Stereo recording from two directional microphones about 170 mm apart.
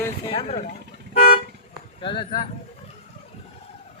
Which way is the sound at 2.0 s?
30° left (ahead or behind).